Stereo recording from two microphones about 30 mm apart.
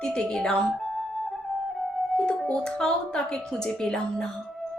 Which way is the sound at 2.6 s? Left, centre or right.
Left.